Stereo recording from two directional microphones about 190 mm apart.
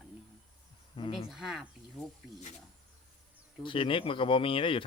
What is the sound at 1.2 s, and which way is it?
Speech, centre (ahead or behind).